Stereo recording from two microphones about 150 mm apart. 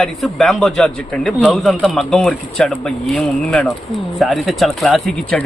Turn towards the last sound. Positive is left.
turn(degrees=5)  # may be behind; listen again after turning